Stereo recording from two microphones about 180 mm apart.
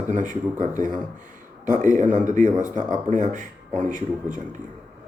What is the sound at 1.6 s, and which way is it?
Speech, 45° right (ahead or behind).